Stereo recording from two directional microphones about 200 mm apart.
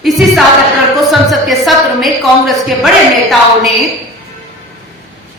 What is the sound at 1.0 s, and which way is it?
A woman's voice, centre (ahead or behind).